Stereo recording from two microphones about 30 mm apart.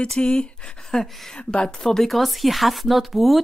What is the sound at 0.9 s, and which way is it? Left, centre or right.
Speech, left.